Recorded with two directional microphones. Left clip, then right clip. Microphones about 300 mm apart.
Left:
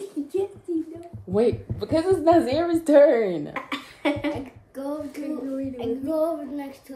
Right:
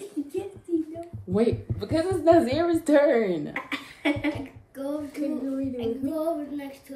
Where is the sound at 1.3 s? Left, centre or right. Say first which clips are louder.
Left 3 dB; centre.